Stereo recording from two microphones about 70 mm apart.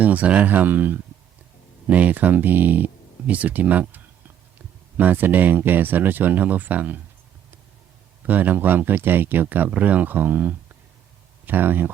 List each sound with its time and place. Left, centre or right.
0.0 s speech: right
8.3 s speech: right